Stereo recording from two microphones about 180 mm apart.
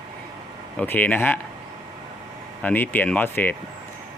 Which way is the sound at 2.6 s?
10° left (ahead or behind).